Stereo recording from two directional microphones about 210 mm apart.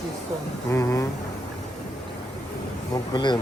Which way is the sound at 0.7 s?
15° left (ahead or behind).